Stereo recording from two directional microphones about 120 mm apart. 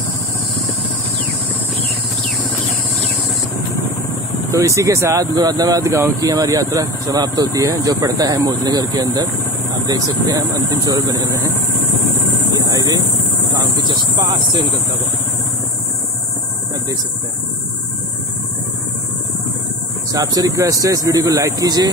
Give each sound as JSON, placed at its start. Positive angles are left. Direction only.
{"t": 4.5, "sound": "speech", "side_deg": -25}
{"t": 12.6, "sound": "vehicle", "side_deg": -30}
{"t": 20.1, "sound": "speech", "side_deg": -30}